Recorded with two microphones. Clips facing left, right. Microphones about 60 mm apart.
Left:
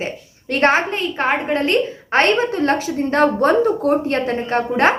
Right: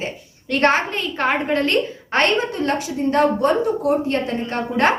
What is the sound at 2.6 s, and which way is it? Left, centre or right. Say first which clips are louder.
A woman's voice: left 3 dB; left.